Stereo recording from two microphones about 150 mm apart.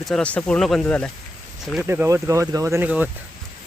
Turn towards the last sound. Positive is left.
turn(degrees=-10)  # may be behind; listen again after turning